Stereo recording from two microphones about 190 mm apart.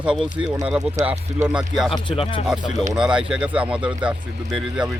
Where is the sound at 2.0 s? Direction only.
30° left (ahead or behind).